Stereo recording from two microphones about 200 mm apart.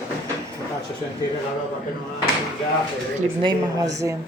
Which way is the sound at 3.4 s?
20° right (ahead or behind).